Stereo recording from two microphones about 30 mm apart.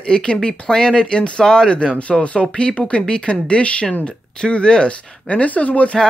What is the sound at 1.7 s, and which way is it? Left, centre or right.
Speech, left.